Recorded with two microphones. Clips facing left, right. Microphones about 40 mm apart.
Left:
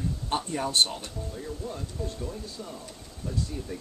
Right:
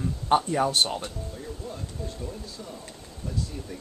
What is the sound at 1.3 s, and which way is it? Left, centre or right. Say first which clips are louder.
Speech: left 1 dB; centre.